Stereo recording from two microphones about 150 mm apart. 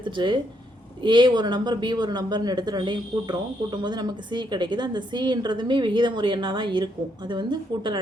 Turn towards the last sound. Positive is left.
turn(degrees=-30)  # may be behind; listen again after turning